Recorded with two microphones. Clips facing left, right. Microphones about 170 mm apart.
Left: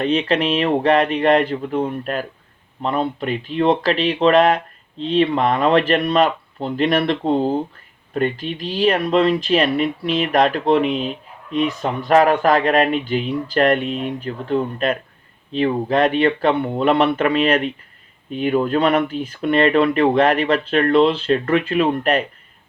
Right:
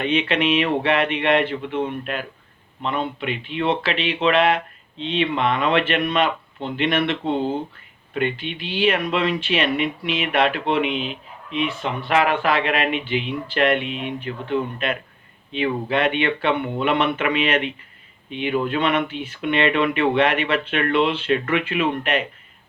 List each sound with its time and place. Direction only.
0.0 s speech: 35° left (ahead or behind)